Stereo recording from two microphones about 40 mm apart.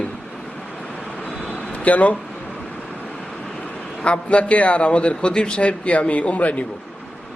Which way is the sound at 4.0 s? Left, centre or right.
Left.